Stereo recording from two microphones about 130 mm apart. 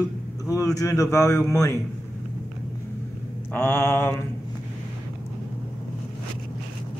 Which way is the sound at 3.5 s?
15° left (ahead or behind).